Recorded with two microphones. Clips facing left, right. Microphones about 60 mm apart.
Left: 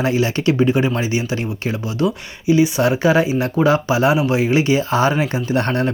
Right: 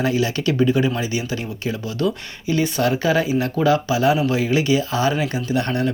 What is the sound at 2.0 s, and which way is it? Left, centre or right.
Speech, centre.